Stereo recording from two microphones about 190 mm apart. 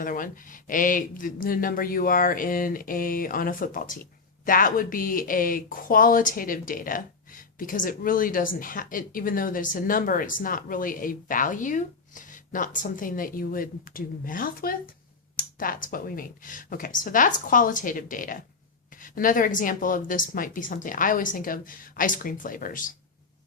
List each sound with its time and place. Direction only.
0.0 s speech: 45° left (ahead or behind)